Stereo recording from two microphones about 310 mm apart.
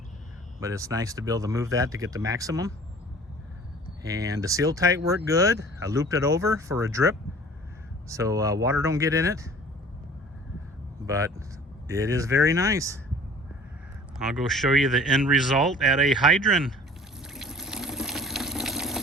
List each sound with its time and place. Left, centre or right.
0.6 s speech: centre
4.0 s speech: centre
11.0 s speech: centre
14.2 s speech: centre
17.2 s water: centre